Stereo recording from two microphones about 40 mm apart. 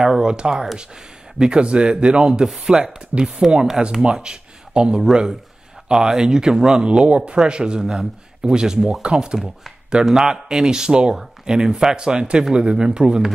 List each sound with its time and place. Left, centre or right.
0.0 s a sound: centre
0.4 s speech: centre
6.9 s speech: right